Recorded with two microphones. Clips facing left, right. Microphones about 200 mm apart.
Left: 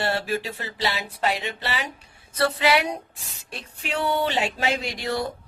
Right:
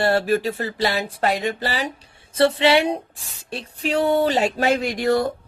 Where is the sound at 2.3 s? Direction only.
25° right (ahead or behind); by 5.3 s 50° right (ahead or behind).